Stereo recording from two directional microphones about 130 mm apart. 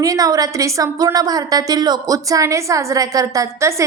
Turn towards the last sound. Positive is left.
turn(degrees=-20)  # may be behind; listen again after turning